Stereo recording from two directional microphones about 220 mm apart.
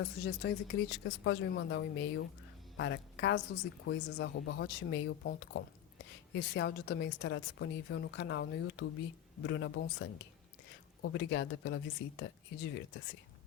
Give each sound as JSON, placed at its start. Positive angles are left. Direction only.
{"t": 0.0, "sound": "a woman's voice", "side_deg": 50}